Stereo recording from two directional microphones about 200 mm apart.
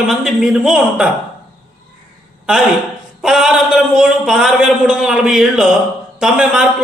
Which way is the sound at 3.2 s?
Centre (ahead or behind).